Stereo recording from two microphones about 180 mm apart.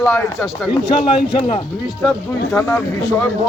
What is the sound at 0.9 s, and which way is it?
Speech, 30° left (ahead or behind).